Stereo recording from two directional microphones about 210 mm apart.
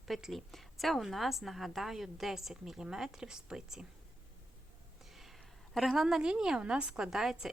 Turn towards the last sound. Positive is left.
turn(degrees=0)  # may be behind; listen again after turning